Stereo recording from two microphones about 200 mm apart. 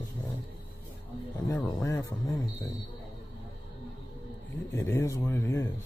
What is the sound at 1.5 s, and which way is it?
Music, 15° left (ahead or behind).